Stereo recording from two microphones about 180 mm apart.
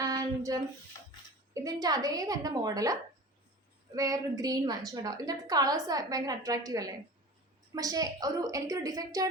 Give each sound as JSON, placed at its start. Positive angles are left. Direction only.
{"t": 0.0, "sound": "child singing", "side_deg": -20}
{"t": 1.5, "sound": "a woman's voice", "side_deg": -20}